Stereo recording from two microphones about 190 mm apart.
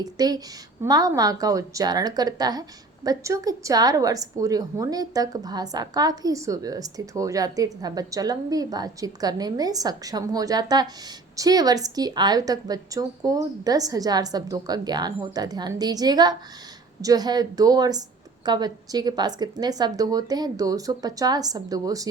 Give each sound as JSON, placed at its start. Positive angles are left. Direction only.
{"t": 0.0, "sound": "a woman's voice", "side_deg": -20}